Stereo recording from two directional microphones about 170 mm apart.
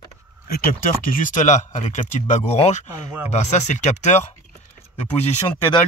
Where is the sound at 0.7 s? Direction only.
55° left (ahead or behind).